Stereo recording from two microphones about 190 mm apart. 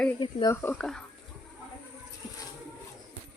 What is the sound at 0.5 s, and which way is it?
Speech, 10° left (ahead or behind).